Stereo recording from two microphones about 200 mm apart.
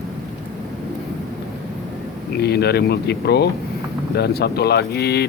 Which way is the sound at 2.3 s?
55° left (ahead or behind).